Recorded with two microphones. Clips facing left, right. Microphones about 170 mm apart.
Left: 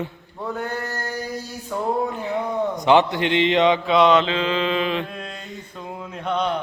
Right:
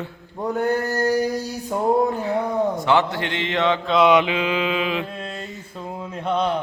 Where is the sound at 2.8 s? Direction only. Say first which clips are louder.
Left 3 dB; 20° left (ahead or behind).